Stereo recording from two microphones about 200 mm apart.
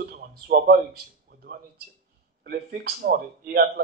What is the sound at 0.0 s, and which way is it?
Speech, 50° right (ahead or behind).